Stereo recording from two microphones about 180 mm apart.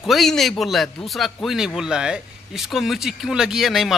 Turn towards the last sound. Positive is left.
turn(degrees=0)  # may be behind; listen again after turning